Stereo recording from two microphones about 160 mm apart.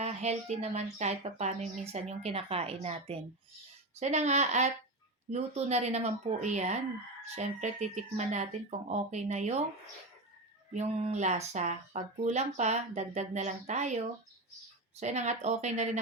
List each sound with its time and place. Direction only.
0.0 s speech: 45° right (ahead or behind)
10.8 s speech: 45° right (ahead or behind)